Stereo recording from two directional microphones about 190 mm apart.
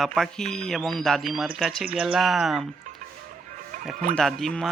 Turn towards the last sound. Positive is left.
turn(degrees=0)  # may be behind; listen again after turning